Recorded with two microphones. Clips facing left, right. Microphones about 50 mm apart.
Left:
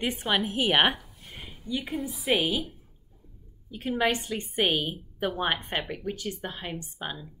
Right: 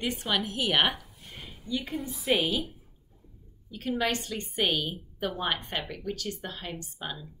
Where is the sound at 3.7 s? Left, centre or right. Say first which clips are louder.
Left 3 dB; centre.